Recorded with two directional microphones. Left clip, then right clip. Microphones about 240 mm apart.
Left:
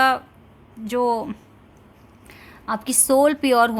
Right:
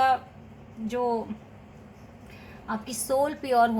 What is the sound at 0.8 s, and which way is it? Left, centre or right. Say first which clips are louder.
Speech: left 6 dB; left.